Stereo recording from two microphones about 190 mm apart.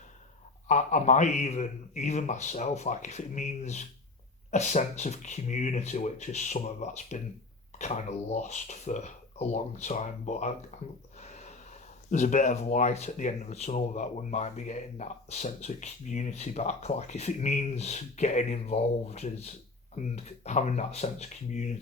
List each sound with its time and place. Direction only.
0.7 s speech: 40° left (ahead or behind)
11.2 s a sound: 35° left (ahead or behind)
12.1 s speech: 40° left (ahead or behind)